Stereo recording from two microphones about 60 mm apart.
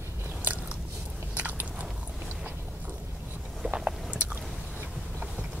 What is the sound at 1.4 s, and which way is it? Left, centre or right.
Biting, right.